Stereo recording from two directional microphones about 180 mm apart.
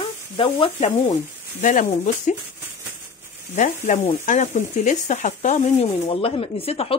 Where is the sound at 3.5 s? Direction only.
45° left (ahead or behind).